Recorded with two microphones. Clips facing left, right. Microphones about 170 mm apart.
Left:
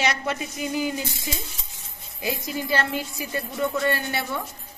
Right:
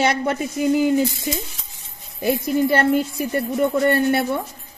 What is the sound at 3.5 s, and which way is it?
Speech, 25° right (ahead or behind).